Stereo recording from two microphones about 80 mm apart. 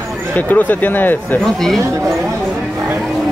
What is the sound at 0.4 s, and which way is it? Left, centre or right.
Speech, left.